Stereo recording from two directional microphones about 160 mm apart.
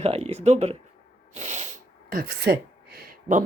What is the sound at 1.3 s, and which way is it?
Sneeze, 45° right (ahead or behind).